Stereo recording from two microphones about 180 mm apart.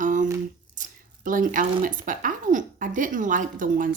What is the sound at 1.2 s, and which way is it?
A woman's voice, 45° right (ahead or behind).